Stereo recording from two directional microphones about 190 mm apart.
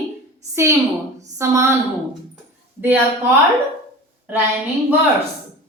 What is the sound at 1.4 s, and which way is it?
Speech, 15° right (ahead or behind).